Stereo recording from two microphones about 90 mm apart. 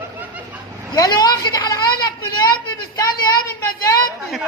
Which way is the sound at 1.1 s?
50° left (ahead or behind).